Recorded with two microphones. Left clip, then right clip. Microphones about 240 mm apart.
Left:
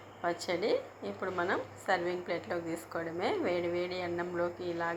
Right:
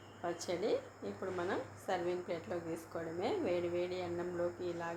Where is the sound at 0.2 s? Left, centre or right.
Centre.